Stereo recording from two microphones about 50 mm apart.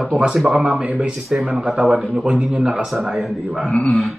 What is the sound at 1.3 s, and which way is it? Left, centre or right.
Speech, centre.